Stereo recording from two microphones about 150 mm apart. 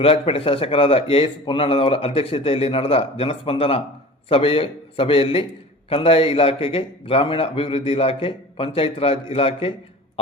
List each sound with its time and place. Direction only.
0.0 s a man's voice: 40° left (ahead or behind)